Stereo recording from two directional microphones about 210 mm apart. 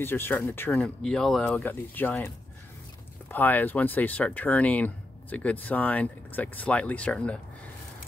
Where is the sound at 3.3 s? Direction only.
10° left (ahead or behind).